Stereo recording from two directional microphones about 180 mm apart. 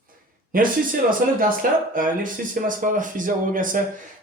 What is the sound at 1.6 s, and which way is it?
Speech, 50° right (ahead or behind).